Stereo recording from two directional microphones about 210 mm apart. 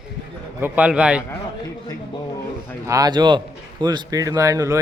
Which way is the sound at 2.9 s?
20° right (ahead or behind).